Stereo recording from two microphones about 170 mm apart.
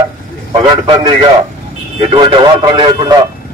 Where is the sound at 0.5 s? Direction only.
25° right (ahead or behind).